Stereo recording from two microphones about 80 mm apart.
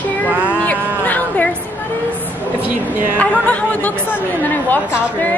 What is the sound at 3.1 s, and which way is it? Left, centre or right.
A woman's voice, centre.